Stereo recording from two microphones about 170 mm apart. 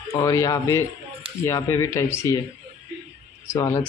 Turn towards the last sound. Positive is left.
turn(degrees=20)  # may be behind; listen again after turning